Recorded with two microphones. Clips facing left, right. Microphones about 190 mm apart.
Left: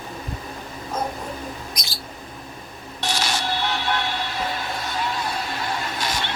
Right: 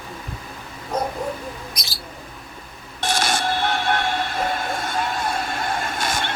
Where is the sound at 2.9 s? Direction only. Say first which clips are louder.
Right 3 dB; 50° right (ahead or behind).